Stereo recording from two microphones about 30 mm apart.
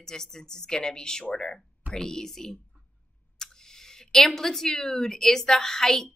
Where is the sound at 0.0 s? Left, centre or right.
Centre.